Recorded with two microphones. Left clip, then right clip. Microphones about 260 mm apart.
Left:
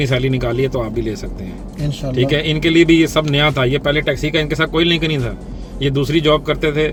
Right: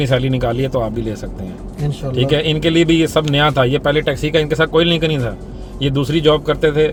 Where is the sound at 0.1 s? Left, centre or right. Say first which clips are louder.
Right 1 dB; centre.